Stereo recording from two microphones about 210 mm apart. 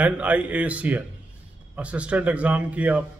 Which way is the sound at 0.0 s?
5° right (ahead or behind).